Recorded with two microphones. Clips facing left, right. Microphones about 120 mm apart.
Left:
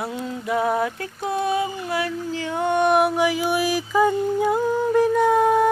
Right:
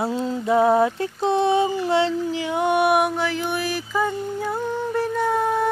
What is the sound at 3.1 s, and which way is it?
Music, 10° left (ahead or behind).